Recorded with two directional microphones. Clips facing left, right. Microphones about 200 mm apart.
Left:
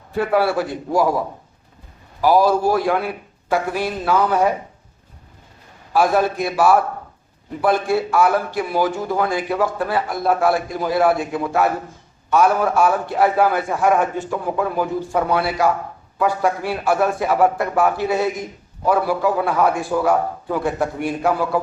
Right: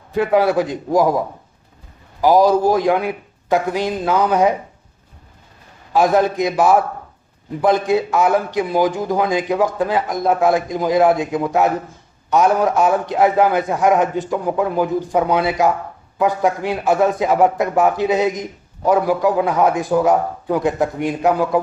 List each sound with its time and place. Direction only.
0.1 s a man's voice: 20° right (ahead or behind)
2.2 s a man's voice: 15° right (ahead or behind)
5.9 s a man's voice: 20° right (ahead or behind)